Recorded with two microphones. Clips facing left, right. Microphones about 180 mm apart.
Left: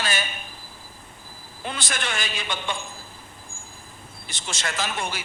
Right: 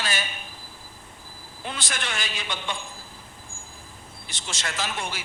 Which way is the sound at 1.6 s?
50° left (ahead or behind).